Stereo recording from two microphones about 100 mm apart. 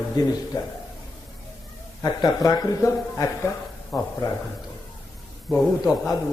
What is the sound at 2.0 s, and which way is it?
A man's voice, 40° left (ahead or behind).